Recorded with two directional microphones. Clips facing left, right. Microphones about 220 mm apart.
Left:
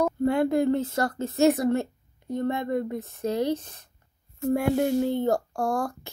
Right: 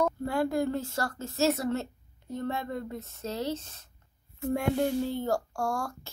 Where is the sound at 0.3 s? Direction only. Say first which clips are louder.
Left 6 dB; 20° left (ahead or behind); by 4.8 s 5° left (ahead or behind).